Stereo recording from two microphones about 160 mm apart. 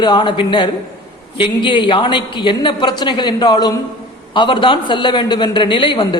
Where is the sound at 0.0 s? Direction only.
30° left (ahead or behind).